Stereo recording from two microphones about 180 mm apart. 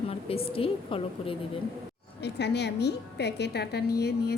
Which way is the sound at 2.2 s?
70° left (ahead or behind).